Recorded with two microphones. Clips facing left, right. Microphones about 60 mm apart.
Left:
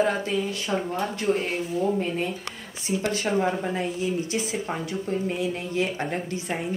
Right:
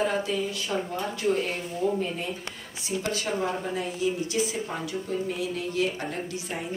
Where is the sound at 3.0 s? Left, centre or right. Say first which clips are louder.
Left 4 dB; left.